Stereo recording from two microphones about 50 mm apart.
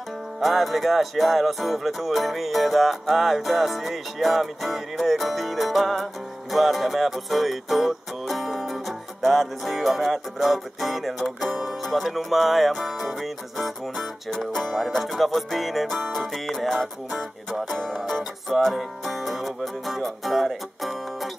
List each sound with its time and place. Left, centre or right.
0.4 s music: centre